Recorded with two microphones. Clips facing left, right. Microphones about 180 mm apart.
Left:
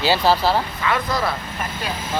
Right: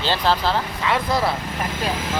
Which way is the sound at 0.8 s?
25° right (ahead or behind).